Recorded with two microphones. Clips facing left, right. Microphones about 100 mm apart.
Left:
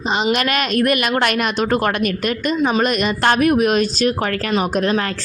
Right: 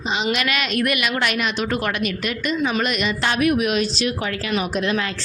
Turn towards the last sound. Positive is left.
turn(degrees=45)  # may be behind; listen again after turning